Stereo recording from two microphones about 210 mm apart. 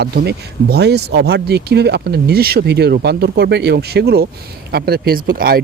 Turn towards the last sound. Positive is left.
turn(degrees=-45)  # may be behind; listen again after turning